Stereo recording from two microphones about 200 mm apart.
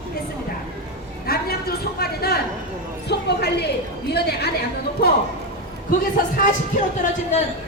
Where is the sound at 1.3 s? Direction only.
50° left (ahead or behind).